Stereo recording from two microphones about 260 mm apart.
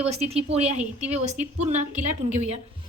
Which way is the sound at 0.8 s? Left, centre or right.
Centre.